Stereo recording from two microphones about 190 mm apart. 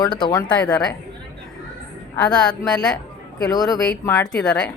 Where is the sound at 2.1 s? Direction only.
5° left (ahead or behind).